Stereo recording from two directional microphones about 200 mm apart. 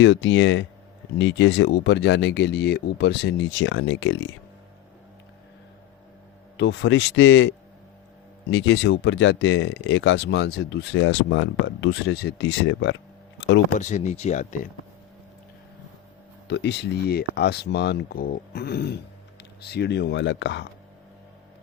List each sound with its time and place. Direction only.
0.0 s speech: 65° left (ahead or behind)
6.6 s speech: 65° left (ahead or behind)
13.7 s speech: 35° left (ahead or behind)
16.5 s speech: 60° left (ahead or behind)